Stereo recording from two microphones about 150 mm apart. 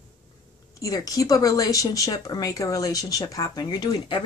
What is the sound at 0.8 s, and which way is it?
Speech, 25° left (ahead or behind).